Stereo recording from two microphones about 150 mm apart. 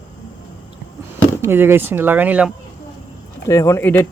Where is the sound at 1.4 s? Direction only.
15° right (ahead or behind).